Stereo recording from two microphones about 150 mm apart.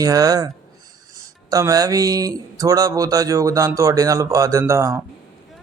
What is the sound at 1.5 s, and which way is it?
Speech, 25° right (ahead or behind).